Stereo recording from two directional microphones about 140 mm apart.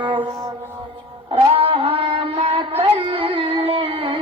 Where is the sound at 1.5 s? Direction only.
45° right (ahead or behind).